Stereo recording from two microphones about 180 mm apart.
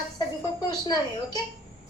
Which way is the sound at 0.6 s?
20° left (ahead or behind).